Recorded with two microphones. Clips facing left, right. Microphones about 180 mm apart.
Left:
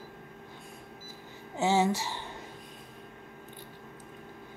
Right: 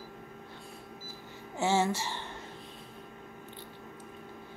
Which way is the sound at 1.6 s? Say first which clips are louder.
Left 2 dB; 15° left (ahead or behind).